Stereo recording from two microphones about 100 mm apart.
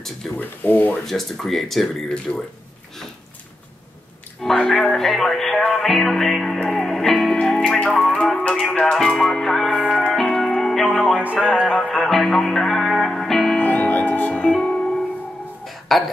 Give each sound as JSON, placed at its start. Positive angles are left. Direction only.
{"t": 0.4, "sound": "speech", "side_deg": 15}
{"t": 1.0, "sound": "speech", "side_deg": 0}
{"t": 4.4, "sound": "speech", "side_deg": 5}
{"t": 6.6, "sound": "music", "side_deg": 5}
{"t": 8.9, "sound": "speech", "side_deg": 0}
{"t": 9.9, "sound": "music", "side_deg": 0}
{"t": 10.9, "sound": "speech", "side_deg": 10}
{"t": 11.3, "sound": "music", "side_deg": 5}
{"t": 13.6, "sound": "music", "side_deg": 15}
{"t": 15.9, "sound": "speech", "side_deg": 0}